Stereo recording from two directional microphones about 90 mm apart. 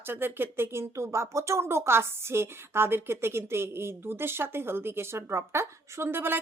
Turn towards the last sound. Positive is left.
turn(degrees=-25)  # may be behind; listen again after turning